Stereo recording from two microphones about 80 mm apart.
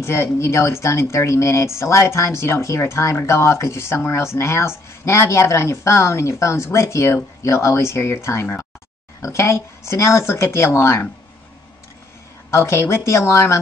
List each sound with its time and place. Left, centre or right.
0.0 s speech: left
12.4 s speech: left